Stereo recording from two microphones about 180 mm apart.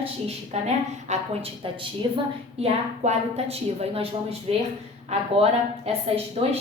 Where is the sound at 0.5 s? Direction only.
35° right (ahead or behind).